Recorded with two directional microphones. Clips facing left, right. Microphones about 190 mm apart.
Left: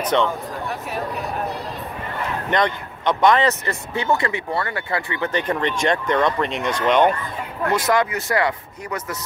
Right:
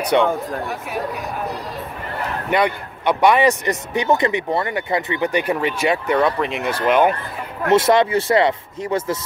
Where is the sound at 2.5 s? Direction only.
10° right (ahead or behind).